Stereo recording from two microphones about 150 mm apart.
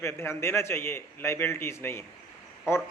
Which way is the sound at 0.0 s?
15° left (ahead or behind).